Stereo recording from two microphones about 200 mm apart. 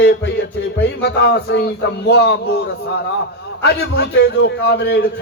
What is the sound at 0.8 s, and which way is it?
A man's voice, 55° left (ahead or behind).